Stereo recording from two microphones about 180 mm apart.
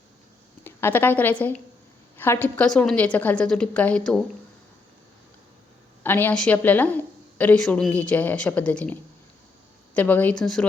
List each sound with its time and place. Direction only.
0.6 s a woman's voice: 10° left (ahead or behind)
6.0 s a woman's voice: 10° left (ahead or behind)